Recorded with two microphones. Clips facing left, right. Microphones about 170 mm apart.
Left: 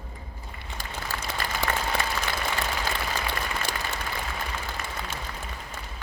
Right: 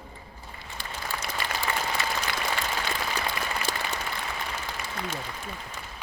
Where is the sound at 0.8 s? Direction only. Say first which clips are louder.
Even; 45° left (ahead or behind).